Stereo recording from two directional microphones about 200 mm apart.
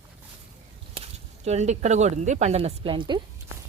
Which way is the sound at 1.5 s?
35° right (ahead or behind).